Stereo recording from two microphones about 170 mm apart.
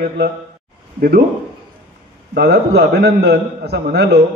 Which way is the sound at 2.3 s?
70° right (ahead or behind).